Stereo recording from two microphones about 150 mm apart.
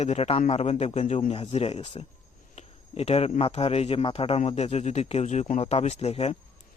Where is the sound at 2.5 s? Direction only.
45° left (ahead or behind).